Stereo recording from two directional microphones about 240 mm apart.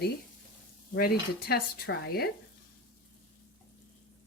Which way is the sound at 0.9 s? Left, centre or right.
Left.